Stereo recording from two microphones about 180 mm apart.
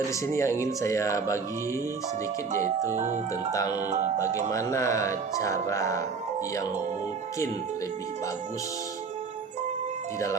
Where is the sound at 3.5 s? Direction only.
20° left (ahead or behind).